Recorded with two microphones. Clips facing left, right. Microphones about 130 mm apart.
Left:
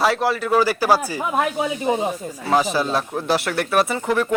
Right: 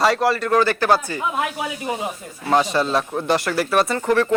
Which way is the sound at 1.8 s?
25° left (ahead or behind).